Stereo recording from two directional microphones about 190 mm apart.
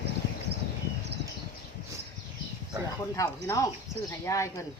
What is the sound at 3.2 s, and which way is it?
Speech, 15° left (ahead or behind).